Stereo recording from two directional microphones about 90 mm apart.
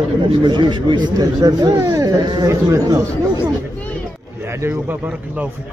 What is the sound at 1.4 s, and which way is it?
Speech, 45° right (ahead or behind).